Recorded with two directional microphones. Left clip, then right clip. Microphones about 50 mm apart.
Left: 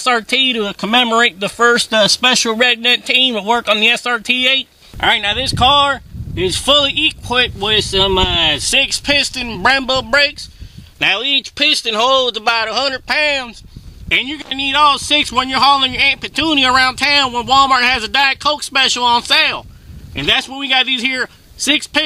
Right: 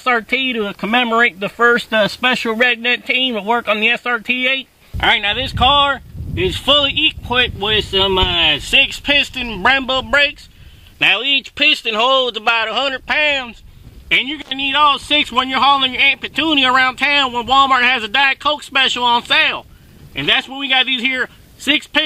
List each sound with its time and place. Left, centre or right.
0.0 s speech: left
5.0 s speech: left